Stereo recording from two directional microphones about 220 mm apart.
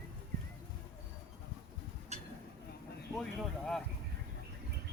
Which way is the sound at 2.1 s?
30° right (ahead or behind).